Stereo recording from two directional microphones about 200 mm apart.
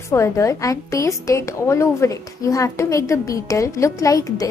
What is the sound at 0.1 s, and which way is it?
A woman's voice, 15° left (ahead or behind).